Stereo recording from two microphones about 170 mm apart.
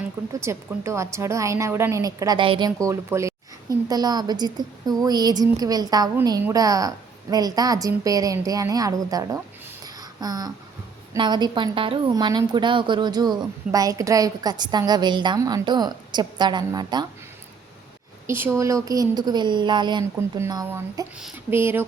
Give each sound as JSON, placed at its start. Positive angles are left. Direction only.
{"t": 0.3, "sound": "a woman's voice", "side_deg": -15}
{"t": 9.8, "sound": "a sound", "side_deg": -20}
{"t": 11.1, "sound": "a woman's voice", "side_deg": -25}
{"t": 18.3, "sound": "a woman's voice", "side_deg": -15}
{"t": 21.2, "sound": "speech", "side_deg": -5}
{"t": 21.5, "sound": "speech", "side_deg": -15}